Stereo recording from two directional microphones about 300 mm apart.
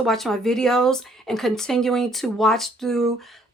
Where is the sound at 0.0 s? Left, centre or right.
Centre.